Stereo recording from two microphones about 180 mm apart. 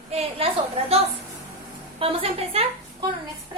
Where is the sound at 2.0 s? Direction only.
30° right (ahead or behind).